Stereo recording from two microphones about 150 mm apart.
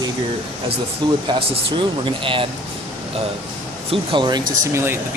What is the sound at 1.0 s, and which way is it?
Speech, 35° right (ahead or behind).